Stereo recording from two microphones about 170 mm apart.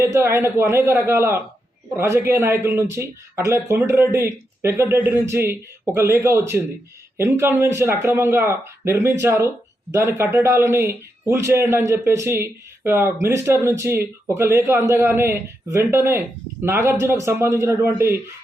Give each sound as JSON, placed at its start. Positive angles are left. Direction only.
{"t": 0.0, "sound": "a man's voice", "side_deg": -15}